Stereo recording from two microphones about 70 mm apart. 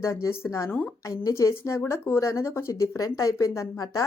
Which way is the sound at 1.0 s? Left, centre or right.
Left.